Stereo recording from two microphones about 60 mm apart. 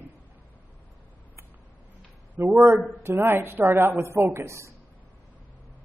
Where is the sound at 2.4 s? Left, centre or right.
Right.